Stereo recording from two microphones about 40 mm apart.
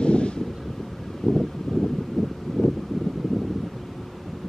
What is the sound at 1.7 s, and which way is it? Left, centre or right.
Wind, centre.